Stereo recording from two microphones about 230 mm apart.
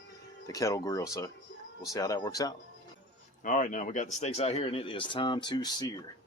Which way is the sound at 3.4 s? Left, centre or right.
Left.